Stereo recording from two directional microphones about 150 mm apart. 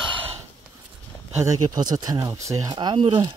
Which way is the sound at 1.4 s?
25° right (ahead or behind).